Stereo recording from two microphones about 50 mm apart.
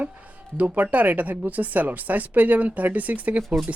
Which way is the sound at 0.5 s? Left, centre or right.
Right.